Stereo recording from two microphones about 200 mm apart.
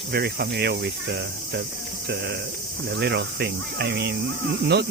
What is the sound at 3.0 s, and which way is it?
Speech, 55° right (ahead or behind).